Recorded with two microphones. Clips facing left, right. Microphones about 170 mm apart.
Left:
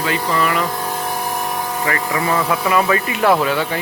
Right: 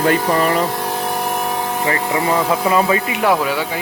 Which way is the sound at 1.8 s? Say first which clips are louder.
Right 2 dB; 25° right (ahead or behind).